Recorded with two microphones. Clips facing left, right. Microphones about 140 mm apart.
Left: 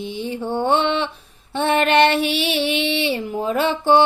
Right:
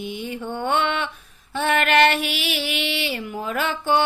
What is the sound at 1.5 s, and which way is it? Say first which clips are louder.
Female singing: left 3 dB; 30° left (ahead or behind).